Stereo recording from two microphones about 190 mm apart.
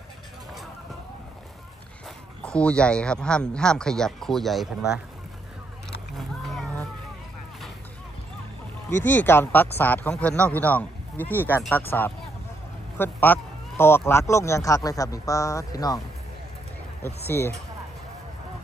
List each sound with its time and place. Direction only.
2.4 s speech: 5° left (ahead or behind)
6.1 s vehicle: centre (ahead or behind)
8.9 s speech: 10° left (ahead or behind)
17.3 s speech: 15° left (ahead or behind)